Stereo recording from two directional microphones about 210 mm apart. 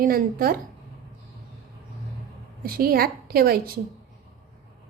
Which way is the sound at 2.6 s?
45° right (ahead or behind).